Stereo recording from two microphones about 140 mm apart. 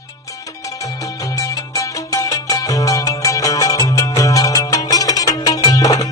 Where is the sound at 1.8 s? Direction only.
25° left (ahead or behind).